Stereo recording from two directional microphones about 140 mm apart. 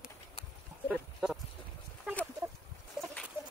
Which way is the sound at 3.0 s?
5° right (ahead or behind).